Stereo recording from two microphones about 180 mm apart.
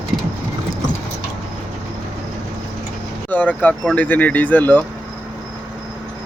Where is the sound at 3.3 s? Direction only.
10° left (ahead or behind).